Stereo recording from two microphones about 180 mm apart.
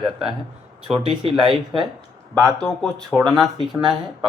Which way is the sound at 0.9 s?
30° right (ahead or behind).